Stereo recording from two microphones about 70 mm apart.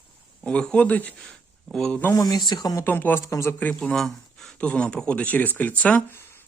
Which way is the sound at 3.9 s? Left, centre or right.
Centre.